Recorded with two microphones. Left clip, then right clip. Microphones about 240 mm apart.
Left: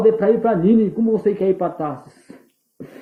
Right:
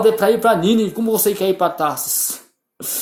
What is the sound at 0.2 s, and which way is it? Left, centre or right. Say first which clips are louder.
Speech: right 2 dB; right.